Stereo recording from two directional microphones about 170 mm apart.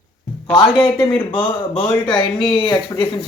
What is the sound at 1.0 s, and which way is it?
Speech, 10° left (ahead or behind).